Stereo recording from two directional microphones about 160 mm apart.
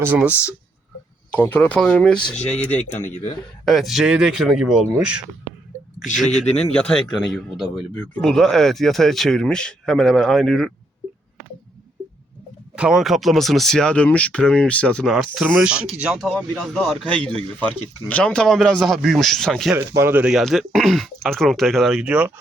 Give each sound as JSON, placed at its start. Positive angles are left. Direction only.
{"t": 0.0, "sound": "speech", "side_deg": -10}
{"t": 1.3, "sound": "speech", "side_deg": 10}
{"t": 3.7, "sound": "speech", "side_deg": 0}
{"t": 6.3, "sound": "speech", "side_deg": 45}
{"t": 6.8, "sound": "speech", "side_deg": 5}
{"t": 12.7, "sound": "speech", "side_deg": -5}
{"t": 19.7, "sound": "speech", "side_deg": -15}